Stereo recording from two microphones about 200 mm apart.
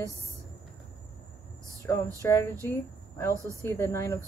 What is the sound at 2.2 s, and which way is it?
A woman's voice, 10° left (ahead or behind).